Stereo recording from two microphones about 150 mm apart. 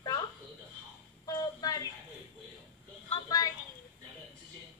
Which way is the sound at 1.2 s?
25° left (ahead or behind).